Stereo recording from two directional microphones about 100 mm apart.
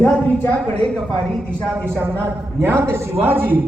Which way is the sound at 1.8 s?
20° right (ahead or behind).